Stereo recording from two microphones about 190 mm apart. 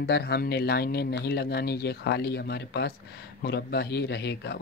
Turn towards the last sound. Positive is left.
turn(degrees=60)  # may be behind; listen again after turning